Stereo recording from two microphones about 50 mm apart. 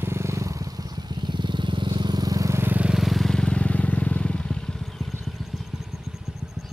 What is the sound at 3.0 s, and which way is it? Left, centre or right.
Vehicle, centre.